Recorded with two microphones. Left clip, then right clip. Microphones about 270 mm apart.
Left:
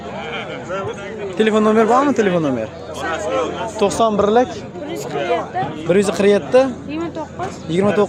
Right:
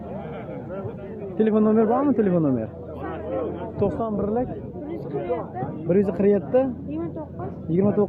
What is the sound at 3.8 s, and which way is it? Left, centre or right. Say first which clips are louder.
Speech: left 10 dB; left.